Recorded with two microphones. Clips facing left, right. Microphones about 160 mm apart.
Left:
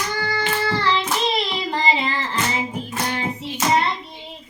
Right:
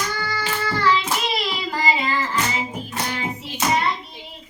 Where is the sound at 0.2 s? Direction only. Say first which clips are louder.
Left 3 dB; 25° left (ahead or behind).